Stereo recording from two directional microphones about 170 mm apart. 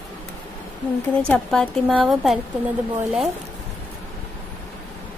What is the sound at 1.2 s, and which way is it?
A woman's voice, 5° left (ahead or behind).